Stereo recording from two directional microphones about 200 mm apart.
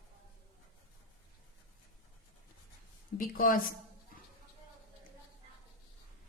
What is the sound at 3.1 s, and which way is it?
Speech, 45° left (ahead or behind).